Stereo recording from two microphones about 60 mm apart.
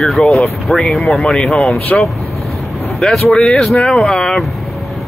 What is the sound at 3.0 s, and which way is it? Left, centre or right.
Speech, centre.